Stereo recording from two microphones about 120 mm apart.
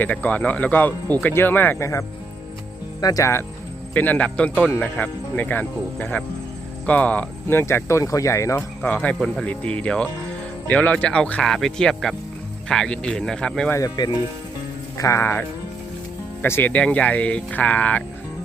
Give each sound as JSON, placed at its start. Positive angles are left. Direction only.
{"t": 0.0, "sound": "speech", "side_deg": 15}
{"t": 3.9, "sound": "speech", "side_deg": 15}
{"t": 8.8, "sound": "speech", "side_deg": 10}
{"t": 13.9, "sound": "speech", "side_deg": 35}